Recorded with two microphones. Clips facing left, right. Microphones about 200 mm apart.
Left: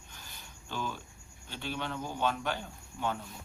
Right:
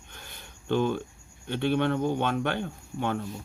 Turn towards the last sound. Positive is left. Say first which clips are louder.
# right 5 dB
turn(degrees=-60)  # may be behind; listen again after turning